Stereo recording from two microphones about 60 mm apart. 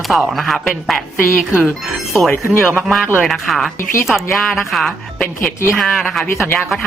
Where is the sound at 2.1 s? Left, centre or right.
Centre.